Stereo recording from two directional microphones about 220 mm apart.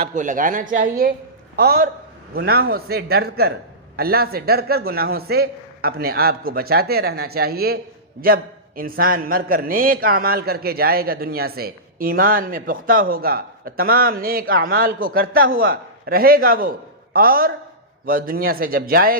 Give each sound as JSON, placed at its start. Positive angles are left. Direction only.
{"t": 0.0, "sound": "a man's voice", "side_deg": -35}